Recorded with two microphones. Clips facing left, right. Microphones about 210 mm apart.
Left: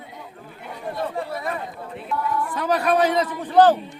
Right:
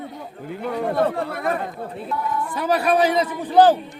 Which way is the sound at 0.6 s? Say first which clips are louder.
Right 8 dB; 80° right.